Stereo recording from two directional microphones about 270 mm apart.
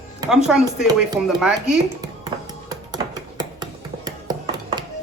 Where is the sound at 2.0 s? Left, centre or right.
Centre.